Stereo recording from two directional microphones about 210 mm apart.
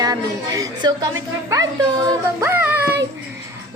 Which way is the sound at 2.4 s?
10° right (ahead or behind).